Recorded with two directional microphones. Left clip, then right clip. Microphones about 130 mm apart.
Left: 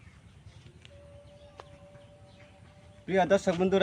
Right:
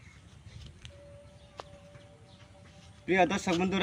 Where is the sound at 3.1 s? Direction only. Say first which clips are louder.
Left 2 dB; 35° left (ahead or behind).